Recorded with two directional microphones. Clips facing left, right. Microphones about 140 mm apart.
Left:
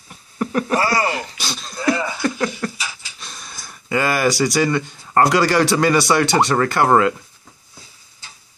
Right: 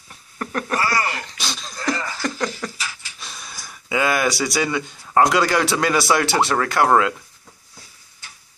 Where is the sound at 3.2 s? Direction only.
Centre (ahead or behind).